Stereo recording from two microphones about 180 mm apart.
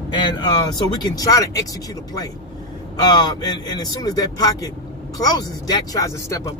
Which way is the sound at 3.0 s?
25° left (ahead or behind).